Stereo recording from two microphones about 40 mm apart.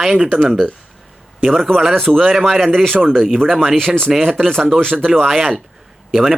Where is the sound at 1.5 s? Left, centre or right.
Centre.